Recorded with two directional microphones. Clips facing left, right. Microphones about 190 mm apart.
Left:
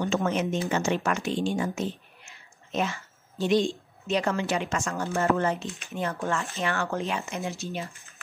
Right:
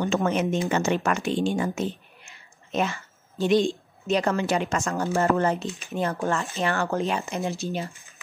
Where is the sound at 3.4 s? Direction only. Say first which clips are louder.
Right 3 dB; 55° right (ahead or behind).